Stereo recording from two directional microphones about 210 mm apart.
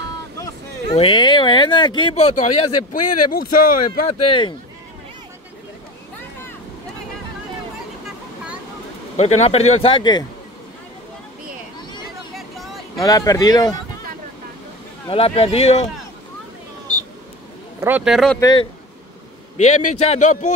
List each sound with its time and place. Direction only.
0.9 s speech: 25° left (ahead or behind)
3.3 s speech: 45° left (ahead or behind)
4.2 s speech: 25° left (ahead or behind)
9.1 s speech: 30° left (ahead or behind)
12.9 s speech: 15° left (ahead or behind)
15.0 s speech: 25° left (ahead or behind)
17.7 s speech: 10° right (ahead or behind)
18.4 s speech: 20° left (ahead or behind)
19.5 s speech: 35° left (ahead or behind)